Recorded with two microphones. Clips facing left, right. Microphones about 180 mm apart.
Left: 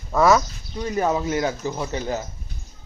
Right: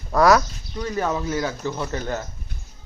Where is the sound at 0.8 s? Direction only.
15° left (ahead or behind).